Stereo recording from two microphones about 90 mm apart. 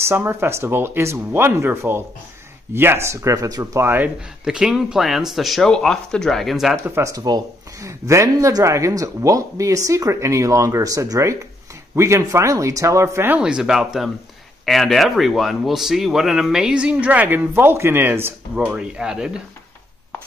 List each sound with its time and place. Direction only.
0.0 s speech: 30° right (ahead or behind)
3.8 s speech: 25° right (ahead or behind)
4.5 s speech: 5° right (ahead or behind)
7.0 s speech: 40° right (ahead or behind)
13.4 s speech: 10° right (ahead or behind); by 18.3 s 25° right (ahead or behind)
18.5 s speech: 10° right (ahead or behind)